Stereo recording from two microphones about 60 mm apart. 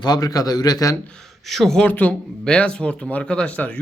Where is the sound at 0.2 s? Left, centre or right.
Left.